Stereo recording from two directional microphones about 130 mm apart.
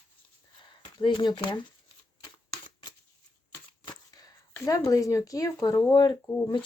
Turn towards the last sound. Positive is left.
turn(degrees=40)  # may be behind; listen again after turning